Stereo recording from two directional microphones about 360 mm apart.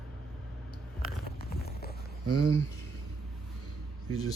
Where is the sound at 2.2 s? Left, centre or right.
Right.